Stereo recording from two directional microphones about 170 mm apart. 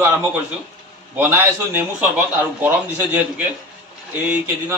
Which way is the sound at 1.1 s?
10° right (ahead or behind).